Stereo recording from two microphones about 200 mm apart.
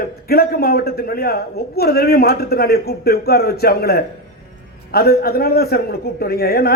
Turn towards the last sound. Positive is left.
turn(degrees=50)  # may be behind; listen again after turning